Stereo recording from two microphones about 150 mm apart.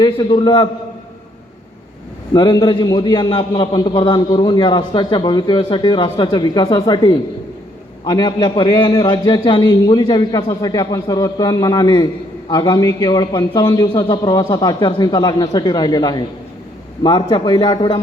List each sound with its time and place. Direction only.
0.0 s a man's voice: 30° left (ahead or behind)
2.3 s a man's voice: 30° left (ahead or behind)